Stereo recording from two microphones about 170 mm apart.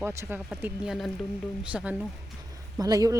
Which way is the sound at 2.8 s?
20° right (ahead or behind).